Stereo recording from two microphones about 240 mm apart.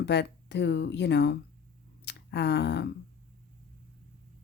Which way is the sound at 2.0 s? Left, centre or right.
Left.